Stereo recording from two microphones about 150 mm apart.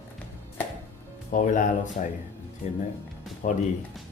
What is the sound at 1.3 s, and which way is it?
Speech, 60° left (ahead or behind).